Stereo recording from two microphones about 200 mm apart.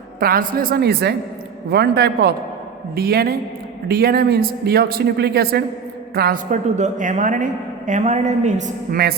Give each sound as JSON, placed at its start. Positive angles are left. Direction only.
{"t": 0.2, "sound": "a man's voice", "side_deg": -45}